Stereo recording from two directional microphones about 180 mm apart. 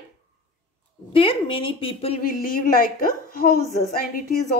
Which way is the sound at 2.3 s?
50° left (ahead or behind).